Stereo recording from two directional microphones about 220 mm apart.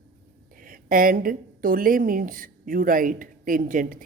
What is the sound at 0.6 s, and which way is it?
A woman's voice, 40° right (ahead or behind).